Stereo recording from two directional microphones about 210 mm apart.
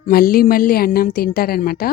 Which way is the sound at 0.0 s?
45° left (ahead or behind).